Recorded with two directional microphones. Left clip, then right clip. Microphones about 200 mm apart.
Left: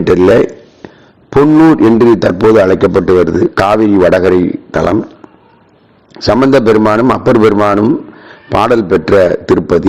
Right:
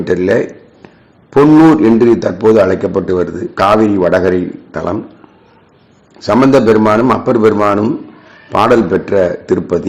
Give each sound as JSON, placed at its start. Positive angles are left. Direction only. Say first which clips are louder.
{"t": 0.0, "sound": "a man's voice", "louder": "left 5 dB", "side_deg": 35}
{"t": 6.1, "sound": "a man's voice", "louder": "left 1 dB", "side_deg": 35}